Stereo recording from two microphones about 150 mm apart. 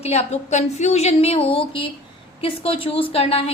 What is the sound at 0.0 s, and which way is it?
A woman's voice, 45° left (ahead or behind).